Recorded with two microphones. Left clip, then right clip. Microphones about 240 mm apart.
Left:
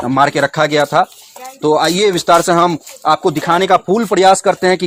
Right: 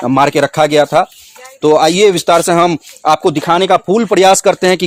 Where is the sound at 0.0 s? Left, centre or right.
Right.